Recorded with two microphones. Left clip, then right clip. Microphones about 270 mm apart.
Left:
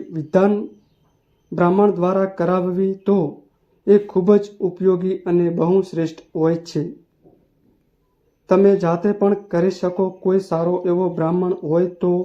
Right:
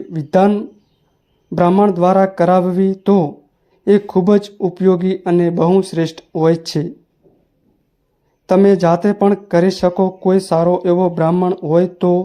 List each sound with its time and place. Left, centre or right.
0.1 s speech: right
8.4 s speech: right